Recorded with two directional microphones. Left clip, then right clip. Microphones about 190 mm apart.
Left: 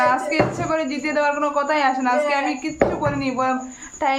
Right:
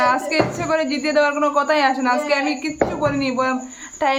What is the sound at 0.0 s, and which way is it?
Speech, 25° right (ahead or behind).